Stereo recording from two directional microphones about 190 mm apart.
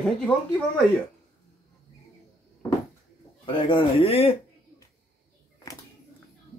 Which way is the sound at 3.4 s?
25° left (ahead or behind).